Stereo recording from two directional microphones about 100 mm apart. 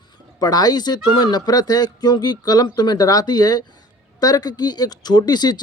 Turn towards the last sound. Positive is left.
turn(degrees=45)  # may be behind; listen again after turning